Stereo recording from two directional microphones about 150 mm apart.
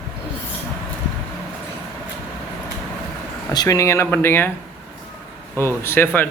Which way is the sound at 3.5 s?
20° left (ahead or behind).